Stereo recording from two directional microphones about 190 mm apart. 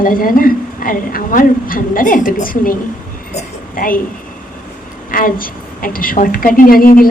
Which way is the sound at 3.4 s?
45° left (ahead or behind).